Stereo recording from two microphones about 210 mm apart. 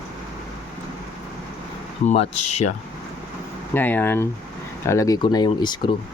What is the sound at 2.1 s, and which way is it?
Speech, 30° left (ahead or behind).